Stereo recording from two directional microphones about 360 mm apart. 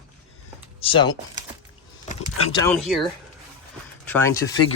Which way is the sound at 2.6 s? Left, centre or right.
Centre.